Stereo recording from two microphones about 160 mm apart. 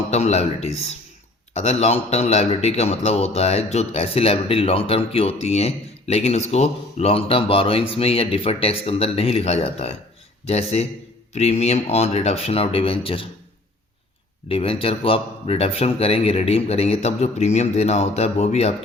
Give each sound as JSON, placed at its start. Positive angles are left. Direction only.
{"t": 0.1, "sound": "a man's voice", "side_deg": 40}
{"t": 14.4, "sound": "a man's voice", "side_deg": 35}